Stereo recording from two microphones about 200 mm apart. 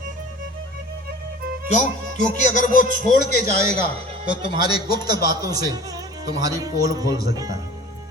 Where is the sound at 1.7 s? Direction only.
35° left (ahead or behind).